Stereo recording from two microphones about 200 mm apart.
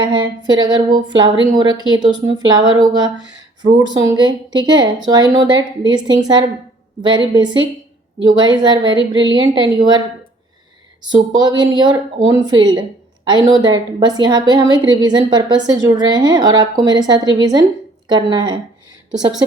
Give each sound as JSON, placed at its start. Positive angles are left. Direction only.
{"t": 0.0, "sound": "a woman's voice", "side_deg": -25}
{"t": 11.1, "sound": "a woman's voice", "side_deg": -20}